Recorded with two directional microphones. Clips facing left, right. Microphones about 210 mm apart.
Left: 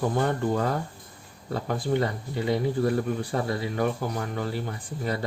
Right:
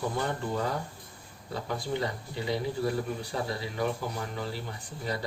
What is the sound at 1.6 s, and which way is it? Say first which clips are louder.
Speech: left 6 dB; 55° left (ahead or behind).